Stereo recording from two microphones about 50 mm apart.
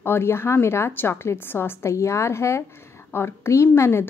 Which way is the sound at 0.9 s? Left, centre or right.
Left.